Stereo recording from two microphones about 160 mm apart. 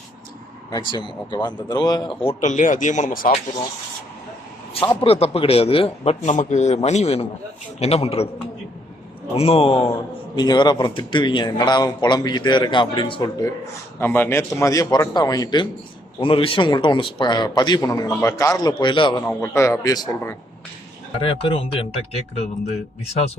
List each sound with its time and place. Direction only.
0.7 s a man's voice: 30° left (ahead or behind)
2.2 s speech: 50° left (ahead or behind)
5.0 s a man's voice: 40° left (ahead or behind)
9.3 s a man's voice: 35° left (ahead or behind)
14.0 s a man's voice: 15° left (ahead or behind)
19.3 s speech: 15° left (ahead or behind)
21.2 s a man's voice: 35° left (ahead or behind)